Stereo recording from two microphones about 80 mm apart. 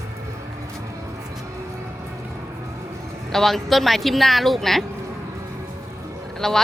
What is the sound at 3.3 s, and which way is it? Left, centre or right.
Speech, centre.